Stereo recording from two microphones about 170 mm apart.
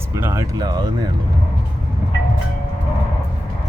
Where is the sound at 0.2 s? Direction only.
15° right (ahead or behind).